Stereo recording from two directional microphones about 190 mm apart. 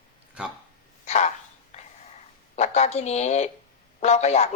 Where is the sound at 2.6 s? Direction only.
35° left (ahead or behind).